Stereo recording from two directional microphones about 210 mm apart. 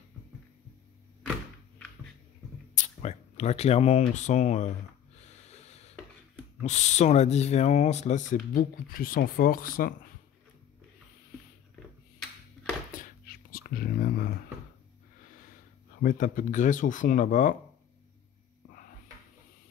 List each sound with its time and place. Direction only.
2.7 s a sound: 35° left (ahead or behind)
4.1 s speech: 35° left (ahead or behind)
5.2 s snort: 30° left (ahead or behind)
6.6 s speech: 35° left (ahead or behind)
13.0 s a sound: 45° left (ahead or behind)
16.0 s speech: 40° left (ahead or behind)